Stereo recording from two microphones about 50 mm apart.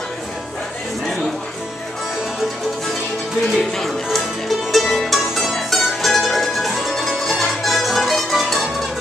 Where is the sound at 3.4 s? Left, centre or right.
Centre.